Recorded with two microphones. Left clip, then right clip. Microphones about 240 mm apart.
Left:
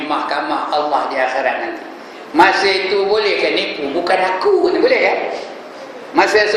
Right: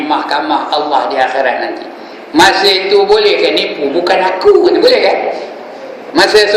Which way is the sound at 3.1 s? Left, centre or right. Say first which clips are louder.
Right 6 dB; centre.